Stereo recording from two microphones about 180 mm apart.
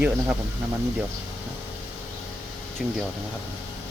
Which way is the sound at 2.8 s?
5° right (ahead or behind).